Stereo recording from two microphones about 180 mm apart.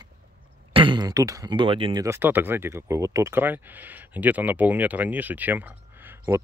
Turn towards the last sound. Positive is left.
turn(degrees=-15)  # may be behind; listen again after turning